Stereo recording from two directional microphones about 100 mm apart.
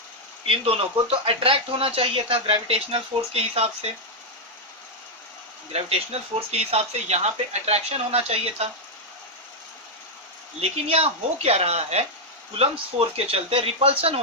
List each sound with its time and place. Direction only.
0.4 s speech: 70° right (ahead or behind); by 3.8 s 90° right
5.7 s speech: 90° right
10.6 s speech: 90° right
12.5 s speech: 75° right (ahead or behind)